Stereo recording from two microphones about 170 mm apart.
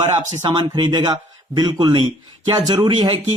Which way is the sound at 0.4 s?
25° right (ahead or behind).